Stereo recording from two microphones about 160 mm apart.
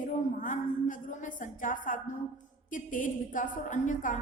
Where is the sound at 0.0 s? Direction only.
55° left (ahead or behind).